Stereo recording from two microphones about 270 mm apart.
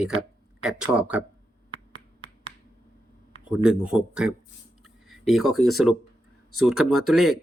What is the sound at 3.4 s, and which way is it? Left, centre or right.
Speech, centre.